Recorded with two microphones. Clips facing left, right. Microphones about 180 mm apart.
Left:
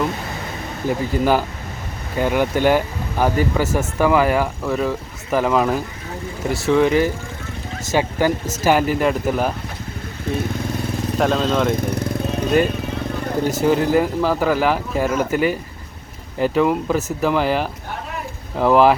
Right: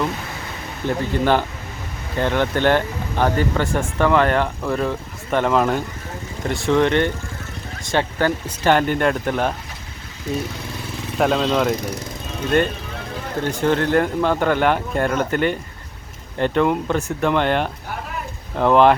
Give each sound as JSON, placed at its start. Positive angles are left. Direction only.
{"t": 0.9, "sound": "speech", "side_deg": 5}
{"t": 11.2, "sound": "speech", "side_deg": 0}
{"t": 11.8, "sound": "speech", "side_deg": 55}
{"t": 13.6, "sound": "speech", "side_deg": 5}